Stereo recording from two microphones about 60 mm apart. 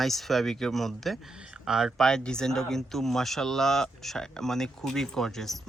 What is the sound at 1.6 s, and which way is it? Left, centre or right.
Speech, centre.